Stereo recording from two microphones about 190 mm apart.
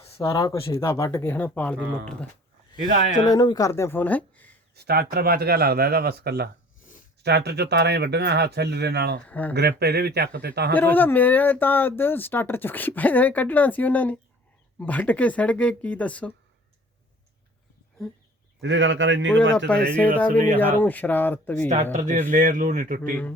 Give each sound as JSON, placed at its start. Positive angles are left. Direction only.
{"t": 0.2, "sound": "speech", "side_deg": 15}
{"t": 2.7, "sound": "speech", "side_deg": 25}
{"t": 4.7, "sound": "speech", "side_deg": -55}
{"t": 9.2, "sound": "speech", "side_deg": 10}
{"t": 9.6, "sound": "speech", "side_deg": -60}
{"t": 10.7, "sound": "speech", "side_deg": 10}
{"t": 18.6, "sound": "a man's voice", "side_deg": -75}
{"t": 19.5, "sound": "speech", "side_deg": 5}
{"t": 21.9, "sound": "speech", "side_deg": -40}